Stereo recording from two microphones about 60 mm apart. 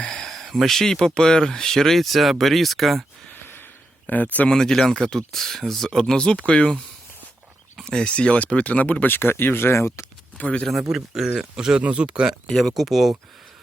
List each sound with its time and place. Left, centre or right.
0.0 s speech: centre
4.0 s speech: left
4.4 s speech: centre; by 10.1 s left
10.3 s speech: left
10.9 s speech: centre
11.8 s speech: right
12.5 s speech: centre